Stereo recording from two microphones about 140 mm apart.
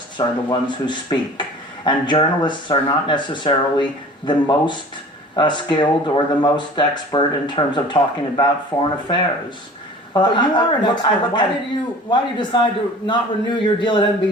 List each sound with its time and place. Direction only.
0.2 s speech: 35° left (ahead or behind)
10.2 s speech: 35° left (ahead or behind)